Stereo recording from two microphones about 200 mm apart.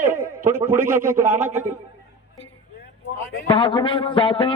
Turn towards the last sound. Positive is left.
turn(degrees=25)  # may be behind; listen again after turning